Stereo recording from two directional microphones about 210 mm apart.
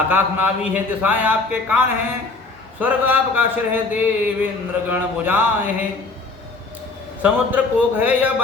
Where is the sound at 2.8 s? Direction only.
10° right (ahead or behind).